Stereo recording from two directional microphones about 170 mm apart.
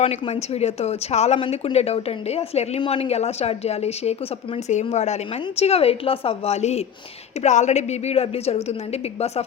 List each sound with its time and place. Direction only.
0.0 s speech: 40° left (ahead or behind)